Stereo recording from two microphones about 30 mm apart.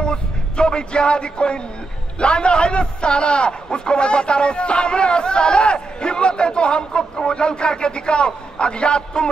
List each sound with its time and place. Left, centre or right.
0.0 s a man's voice: left